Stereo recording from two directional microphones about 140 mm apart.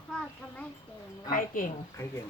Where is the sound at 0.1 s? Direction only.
10° left (ahead or behind).